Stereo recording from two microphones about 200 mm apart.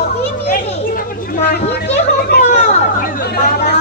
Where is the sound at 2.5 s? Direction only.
35° left (ahead or behind).